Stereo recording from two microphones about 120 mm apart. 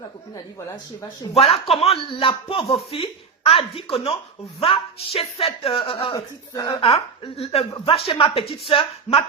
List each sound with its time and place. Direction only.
1.3 s speech: 55° left (ahead or behind)
6.1 s speech: 25° left (ahead or behind)
6.7 s speech: 50° left (ahead or behind)